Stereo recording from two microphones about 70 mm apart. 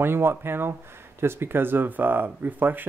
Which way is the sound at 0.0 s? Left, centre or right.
Right.